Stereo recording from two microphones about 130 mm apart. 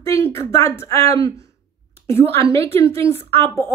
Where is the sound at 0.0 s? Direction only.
20° left (ahead or behind).